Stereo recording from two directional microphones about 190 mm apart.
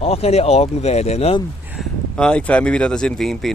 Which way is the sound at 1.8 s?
5° left (ahead or behind).